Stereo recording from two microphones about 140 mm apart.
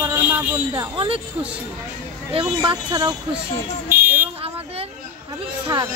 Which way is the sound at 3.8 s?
15° right (ahead or behind).